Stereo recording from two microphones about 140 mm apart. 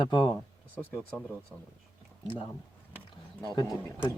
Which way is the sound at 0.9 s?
10° right (ahead or behind).